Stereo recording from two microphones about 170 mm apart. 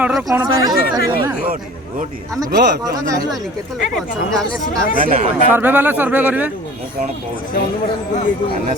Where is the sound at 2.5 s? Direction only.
70° right (ahead or behind).